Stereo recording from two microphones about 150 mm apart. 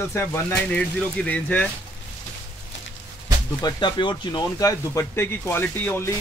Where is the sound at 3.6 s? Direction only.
30° left (ahead or behind); by 6.1 s 15° left (ahead or behind).